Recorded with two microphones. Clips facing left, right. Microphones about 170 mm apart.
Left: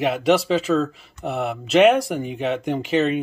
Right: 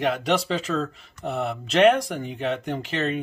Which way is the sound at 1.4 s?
10° left (ahead or behind).